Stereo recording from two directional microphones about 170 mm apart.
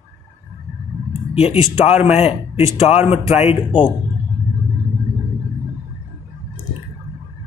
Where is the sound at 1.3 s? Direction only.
35° left (ahead or behind).